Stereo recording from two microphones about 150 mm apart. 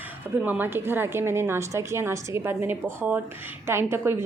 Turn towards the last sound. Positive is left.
turn(degrees=-15)  # may be behind; listen again after turning